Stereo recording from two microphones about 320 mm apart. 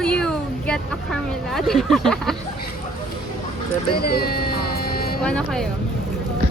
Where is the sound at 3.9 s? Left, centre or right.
Left.